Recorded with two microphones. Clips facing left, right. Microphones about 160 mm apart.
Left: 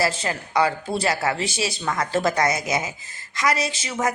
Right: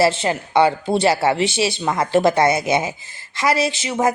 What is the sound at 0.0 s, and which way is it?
A woman's voice, 30° right (ahead or behind).